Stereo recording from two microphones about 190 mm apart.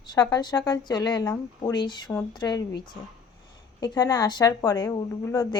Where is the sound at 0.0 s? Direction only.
20° left (ahead or behind).